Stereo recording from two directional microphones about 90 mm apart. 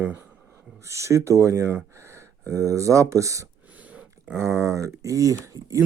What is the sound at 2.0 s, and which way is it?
Gasp, 35° right (ahead or behind).